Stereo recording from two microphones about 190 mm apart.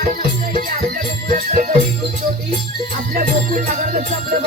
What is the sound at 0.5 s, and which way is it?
Music, 50° right (ahead or behind).